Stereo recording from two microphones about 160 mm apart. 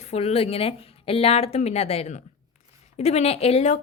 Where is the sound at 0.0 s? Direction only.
40° left (ahead or behind).